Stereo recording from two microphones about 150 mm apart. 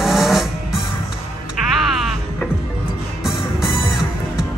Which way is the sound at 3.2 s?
5° right (ahead or behind).